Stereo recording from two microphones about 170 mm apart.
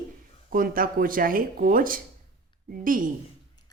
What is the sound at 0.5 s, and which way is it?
A woman's voice, 55° right (ahead or behind).